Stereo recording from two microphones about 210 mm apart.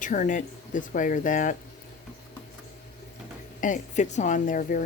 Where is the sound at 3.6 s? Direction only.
35° left (ahead or behind).